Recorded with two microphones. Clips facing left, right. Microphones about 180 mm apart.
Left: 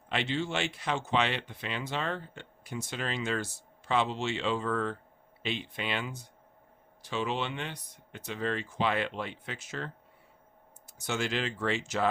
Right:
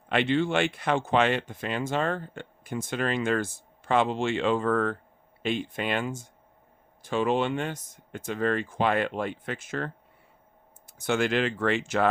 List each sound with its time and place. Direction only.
0.1 s speech: 55° right (ahead or behind)